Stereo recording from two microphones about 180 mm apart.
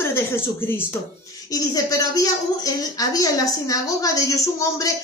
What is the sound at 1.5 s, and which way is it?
A woman's voice, 20° left (ahead or behind).